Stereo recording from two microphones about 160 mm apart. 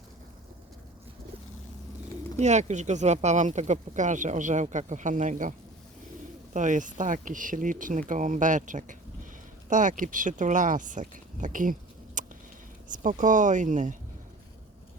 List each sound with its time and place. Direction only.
2.4 s speech: 45° right (ahead or behind)